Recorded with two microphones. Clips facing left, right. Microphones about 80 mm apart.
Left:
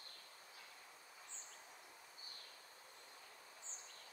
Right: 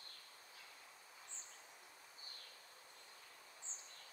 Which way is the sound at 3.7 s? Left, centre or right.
Right.